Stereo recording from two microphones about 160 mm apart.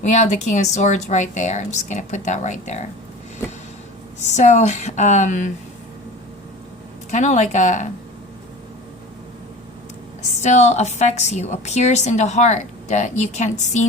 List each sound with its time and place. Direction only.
0.0 s a woman's voice: 45° left (ahead or behind)
4.2 s a woman's voice: 45° left (ahead or behind)
7.1 s a woman's voice: 45° left (ahead or behind)
10.4 s a woman's voice: 45° left (ahead or behind)